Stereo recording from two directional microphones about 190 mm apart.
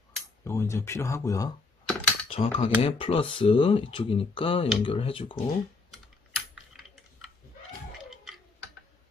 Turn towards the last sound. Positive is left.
turn(degrees=0)  # may be behind; listen again after turning